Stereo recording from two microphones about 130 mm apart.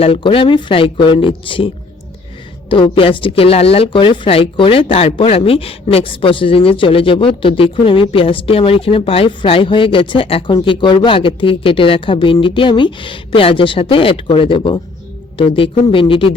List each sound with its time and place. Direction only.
0.0 s speech: 45° left (ahead or behind)